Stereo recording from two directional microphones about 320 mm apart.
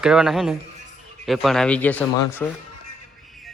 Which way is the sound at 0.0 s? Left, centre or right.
Centre.